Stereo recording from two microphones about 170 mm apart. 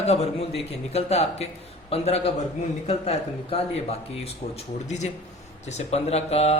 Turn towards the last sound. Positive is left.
turn(degrees=40)  # may be behind; listen again after turning